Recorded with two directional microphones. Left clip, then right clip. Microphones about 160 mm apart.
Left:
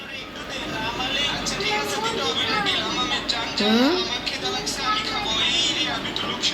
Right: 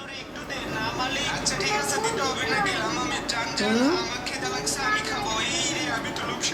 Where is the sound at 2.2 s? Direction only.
40° right (ahead or behind).